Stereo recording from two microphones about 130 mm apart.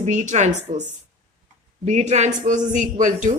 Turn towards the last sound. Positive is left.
turn(degrees=-75)  # may be behind; listen again after turning